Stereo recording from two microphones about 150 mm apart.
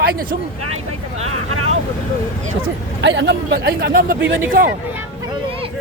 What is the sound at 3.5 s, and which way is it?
Speech, 90° right.